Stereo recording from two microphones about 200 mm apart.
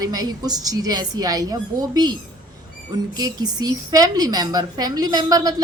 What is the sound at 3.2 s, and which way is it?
Speech, 20° right (ahead or behind).